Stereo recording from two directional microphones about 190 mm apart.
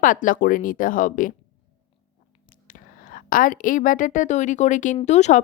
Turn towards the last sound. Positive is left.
turn(degrees=35)  # may be behind; listen again after turning